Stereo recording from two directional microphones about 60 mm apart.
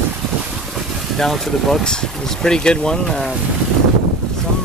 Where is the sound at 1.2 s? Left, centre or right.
Centre.